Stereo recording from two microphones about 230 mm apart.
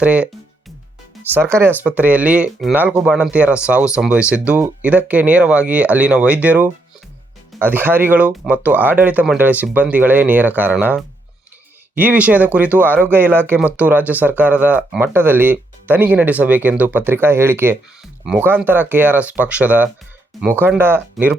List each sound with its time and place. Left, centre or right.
0.0 s speech: centre
1.3 s speech: centre